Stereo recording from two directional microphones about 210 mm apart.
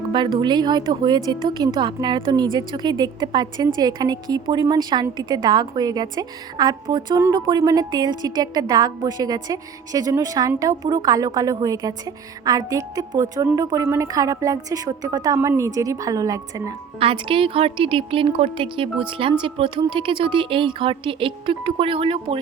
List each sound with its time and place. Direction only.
0.1 s a woman's voice: 20° right (ahead or behind)